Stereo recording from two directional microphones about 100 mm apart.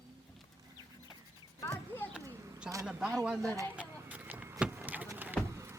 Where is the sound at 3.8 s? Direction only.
15° right (ahead or behind).